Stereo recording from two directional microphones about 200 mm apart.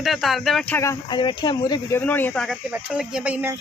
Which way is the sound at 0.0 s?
Centre (ahead or behind).